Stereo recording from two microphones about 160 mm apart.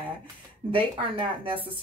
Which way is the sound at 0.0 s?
35° right (ahead or behind).